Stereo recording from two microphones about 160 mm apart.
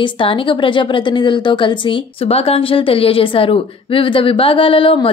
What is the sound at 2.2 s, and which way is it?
A woman's voice, 40° left (ahead or behind).